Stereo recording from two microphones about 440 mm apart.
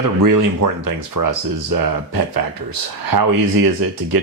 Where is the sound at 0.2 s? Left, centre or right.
Right.